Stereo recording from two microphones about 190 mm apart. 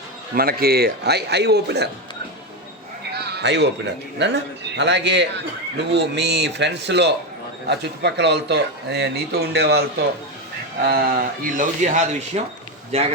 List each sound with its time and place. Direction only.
0.3 s speech: 55° right (ahead or behind)
3.1 s sheep: 60° right (ahead or behind)
4.2 s speech: 65° right (ahead or behind)
10.8 s a man's voice: 50° right (ahead or behind); by 13.1 s 35° right (ahead or behind)